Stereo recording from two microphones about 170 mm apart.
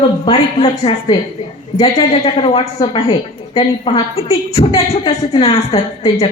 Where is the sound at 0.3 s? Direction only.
30° left (ahead or behind).